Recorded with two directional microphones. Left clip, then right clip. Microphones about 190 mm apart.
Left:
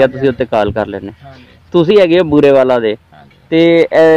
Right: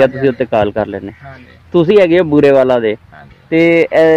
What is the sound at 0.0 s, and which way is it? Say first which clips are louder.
Speech: even; 5° left (ahead or behind).